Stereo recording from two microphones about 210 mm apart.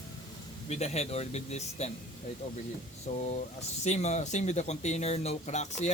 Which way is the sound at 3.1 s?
30° left (ahead or behind).